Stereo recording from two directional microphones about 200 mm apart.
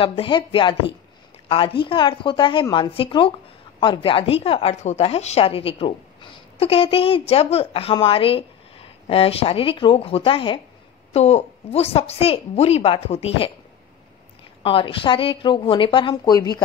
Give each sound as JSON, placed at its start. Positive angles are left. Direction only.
{"t": 0.0, "sound": "a woman's voice", "side_deg": 25}
{"t": 14.6, "sound": "speech", "side_deg": 25}